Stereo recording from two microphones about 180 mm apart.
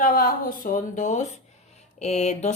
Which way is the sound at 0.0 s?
50° left (ahead or behind).